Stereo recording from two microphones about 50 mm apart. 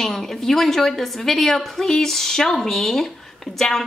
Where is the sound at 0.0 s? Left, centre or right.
Centre.